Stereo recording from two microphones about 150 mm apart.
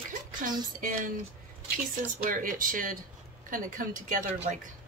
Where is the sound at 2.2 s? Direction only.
65° right (ahead or behind).